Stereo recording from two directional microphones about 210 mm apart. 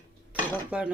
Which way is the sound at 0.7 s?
5° right (ahead or behind).